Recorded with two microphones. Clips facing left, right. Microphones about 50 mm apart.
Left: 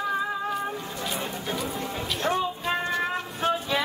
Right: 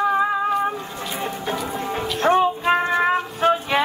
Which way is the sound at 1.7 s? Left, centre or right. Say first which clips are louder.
Right 6 dB; right.